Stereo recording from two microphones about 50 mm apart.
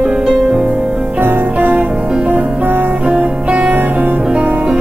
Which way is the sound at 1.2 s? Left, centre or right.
Right.